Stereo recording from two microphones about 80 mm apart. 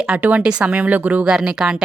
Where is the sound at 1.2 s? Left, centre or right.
Centre.